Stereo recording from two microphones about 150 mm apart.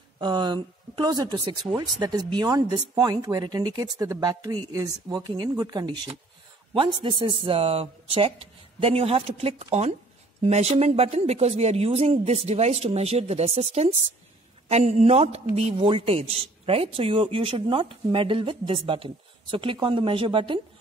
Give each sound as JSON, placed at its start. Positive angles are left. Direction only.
{"t": 0.2, "sound": "a man's voice", "side_deg": -30}